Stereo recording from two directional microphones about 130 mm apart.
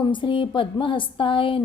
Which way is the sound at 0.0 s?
40° left (ahead or behind).